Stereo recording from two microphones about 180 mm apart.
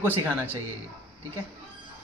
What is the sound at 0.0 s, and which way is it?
Speech, 10° right (ahead or behind).